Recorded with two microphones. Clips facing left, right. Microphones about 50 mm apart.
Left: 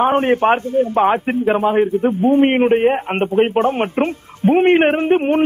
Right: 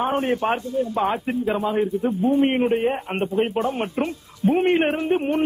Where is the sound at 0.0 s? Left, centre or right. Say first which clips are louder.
Left 8 dB; left.